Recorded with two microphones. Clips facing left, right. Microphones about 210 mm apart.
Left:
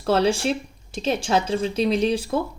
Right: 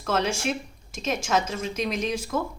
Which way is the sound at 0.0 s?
35° left (ahead or behind).